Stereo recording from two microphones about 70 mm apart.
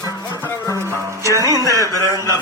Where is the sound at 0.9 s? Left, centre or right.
Right.